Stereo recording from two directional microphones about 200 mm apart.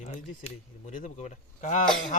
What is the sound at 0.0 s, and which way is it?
Speech, 35° left (ahead or behind).